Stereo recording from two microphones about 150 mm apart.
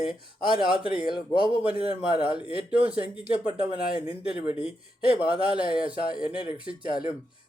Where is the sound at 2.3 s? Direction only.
10° right (ahead or behind).